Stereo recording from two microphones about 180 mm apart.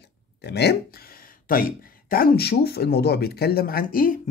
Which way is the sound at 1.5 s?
55° left (ahead or behind).